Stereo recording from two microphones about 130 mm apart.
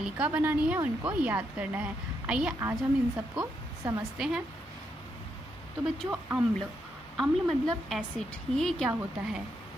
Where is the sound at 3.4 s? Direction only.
20° right (ahead or behind).